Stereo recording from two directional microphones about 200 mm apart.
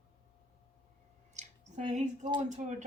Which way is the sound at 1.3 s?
35° right (ahead or behind).